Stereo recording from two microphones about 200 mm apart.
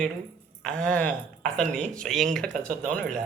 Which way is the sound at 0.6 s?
5° left (ahead or behind).